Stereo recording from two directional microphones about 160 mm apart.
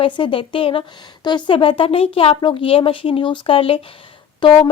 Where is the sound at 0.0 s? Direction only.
30° left (ahead or behind).